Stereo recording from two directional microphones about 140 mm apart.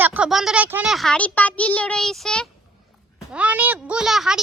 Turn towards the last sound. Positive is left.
turn(degrees=-5)  # may be behind; listen again after turning